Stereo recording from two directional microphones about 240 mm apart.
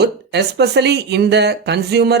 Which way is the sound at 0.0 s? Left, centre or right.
Right.